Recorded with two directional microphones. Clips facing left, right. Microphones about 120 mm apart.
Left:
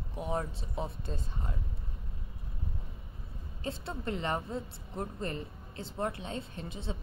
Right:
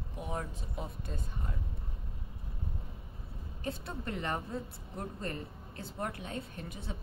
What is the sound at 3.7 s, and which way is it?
Speech, 25° left (ahead or behind).